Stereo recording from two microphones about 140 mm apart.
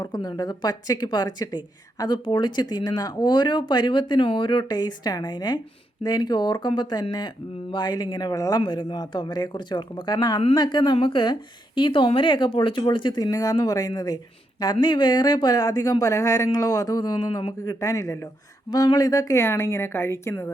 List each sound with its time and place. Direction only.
0.0 s speech: 30° left (ahead or behind)